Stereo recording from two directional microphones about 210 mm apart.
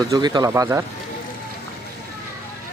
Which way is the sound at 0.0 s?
20° right (ahead or behind).